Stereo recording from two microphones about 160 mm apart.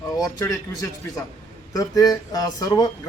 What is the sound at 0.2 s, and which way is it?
Speech, 20° left (ahead or behind).